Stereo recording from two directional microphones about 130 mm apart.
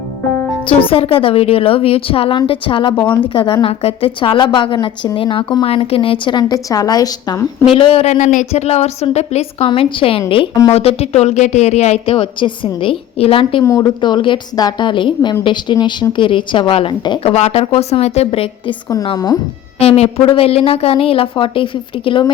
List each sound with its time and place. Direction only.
0.7 s a woman's voice: 45° left (ahead or behind); by 7.4 s 30° left (ahead or behind)
7.8 s speech: 45° left (ahead or behind)
13.7 s a woman's voice: 30° left (ahead or behind)
17.3 s speech: 55° left (ahead or behind)
19.0 s a woman's voice: 30° left (ahead or behind)
19.8 s speech: 50° left (ahead or behind)